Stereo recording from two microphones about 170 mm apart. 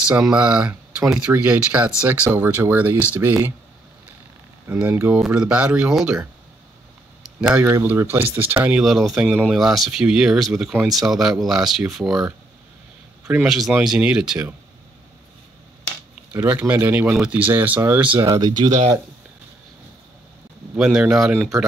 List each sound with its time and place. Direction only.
0.0 s speech: 5° right (ahead or behind)
4.6 s speech: 10° right (ahead or behind)
7.3 s speech: 5° right (ahead or behind)
16.3 s speech: 10° right (ahead or behind)
18.2 s speech: 20° right (ahead or behind)
20.7 s speech: 5° right (ahead or behind)